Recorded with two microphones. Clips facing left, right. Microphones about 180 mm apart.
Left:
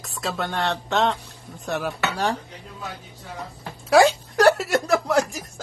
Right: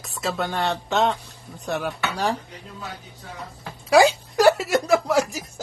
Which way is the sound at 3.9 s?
Centre (ahead or behind).